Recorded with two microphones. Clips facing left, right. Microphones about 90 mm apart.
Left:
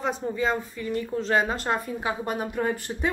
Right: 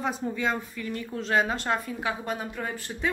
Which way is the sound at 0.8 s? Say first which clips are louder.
Left 4 dB; 25° left (ahead or behind).